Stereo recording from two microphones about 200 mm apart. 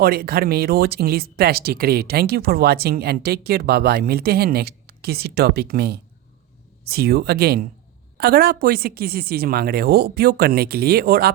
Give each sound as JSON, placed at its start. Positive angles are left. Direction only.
{"t": 0.0, "sound": "speech", "side_deg": -50}